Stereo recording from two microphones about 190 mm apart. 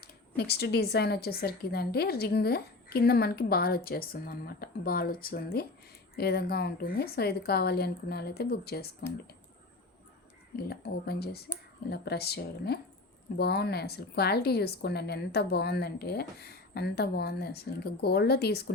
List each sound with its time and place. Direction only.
0.0 s a woman's voice: 55° left (ahead or behind)
10.6 s speech: 55° left (ahead or behind)